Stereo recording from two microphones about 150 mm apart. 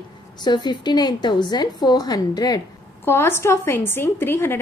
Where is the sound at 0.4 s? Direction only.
30° left (ahead or behind).